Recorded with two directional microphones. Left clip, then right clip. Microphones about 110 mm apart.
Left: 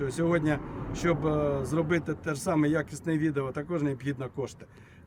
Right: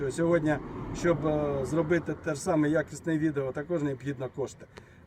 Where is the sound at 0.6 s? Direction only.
45° right (ahead or behind).